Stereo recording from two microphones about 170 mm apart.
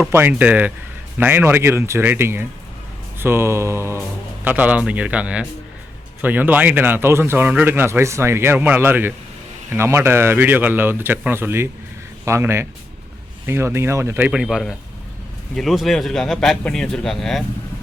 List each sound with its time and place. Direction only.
0.1 s a man's voice: 10° right (ahead or behind)